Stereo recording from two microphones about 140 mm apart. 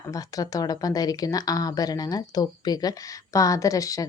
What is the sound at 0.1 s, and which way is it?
A woman's voice, 25° left (ahead or behind).